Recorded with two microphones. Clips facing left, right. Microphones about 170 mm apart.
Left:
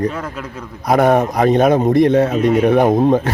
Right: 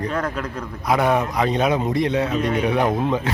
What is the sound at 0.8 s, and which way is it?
Speech, 45° left (ahead or behind).